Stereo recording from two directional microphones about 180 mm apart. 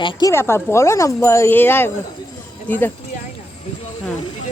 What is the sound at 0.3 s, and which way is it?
Speech, 15° left (ahead or behind).